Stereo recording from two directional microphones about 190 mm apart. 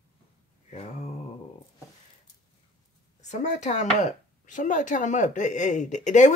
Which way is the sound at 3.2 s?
35° left (ahead or behind).